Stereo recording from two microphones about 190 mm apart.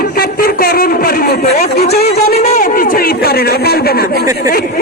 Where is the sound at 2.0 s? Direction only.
35° left (ahead or behind).